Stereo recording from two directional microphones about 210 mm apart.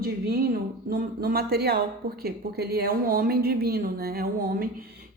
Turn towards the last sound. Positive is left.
turn(degrees=-45)  # may be behind; listen again after turning